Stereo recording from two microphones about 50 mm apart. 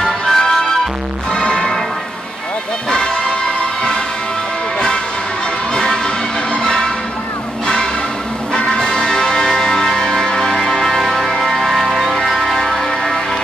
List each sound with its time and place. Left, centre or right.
0.3 s music: centre
4.7 s music: centre
7.6 s a sound: centre
8.7 s music: centre